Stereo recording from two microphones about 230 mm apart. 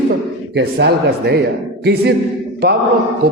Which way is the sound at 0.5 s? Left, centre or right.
Right.